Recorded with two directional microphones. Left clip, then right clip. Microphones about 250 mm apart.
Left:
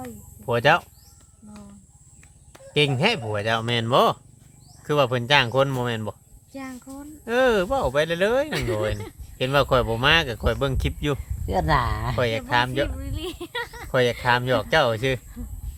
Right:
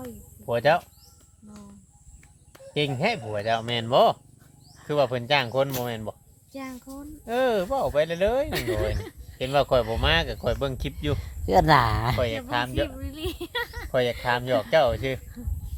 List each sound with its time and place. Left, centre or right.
0.4 s speech: left
2.7 s speech: left
6.5 s speech: centre
7.3 s speech: left
8.5 s speech: centre
9.4 s speech: left
11.2 s speech: right
12.1 s speech: left
13.0 s speech: centre
13.9 s speech: left